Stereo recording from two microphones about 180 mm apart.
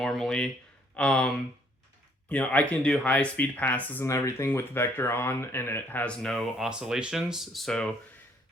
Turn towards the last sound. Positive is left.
turn(degrees=0)  # may be behind; listen again after turning